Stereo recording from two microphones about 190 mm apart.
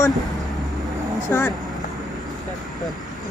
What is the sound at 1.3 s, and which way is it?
Speech, 10° left (ahead or behind).